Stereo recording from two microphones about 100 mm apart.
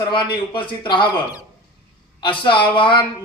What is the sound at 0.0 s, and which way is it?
Music, 55° left (ahead or behind).